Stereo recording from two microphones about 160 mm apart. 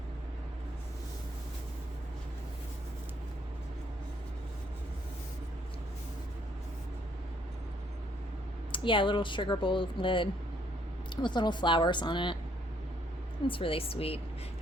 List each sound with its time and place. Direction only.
8.7 s a woman's voice: 30° left (ahead or behind)
13.5 s speech: 35° left (ahead or behind)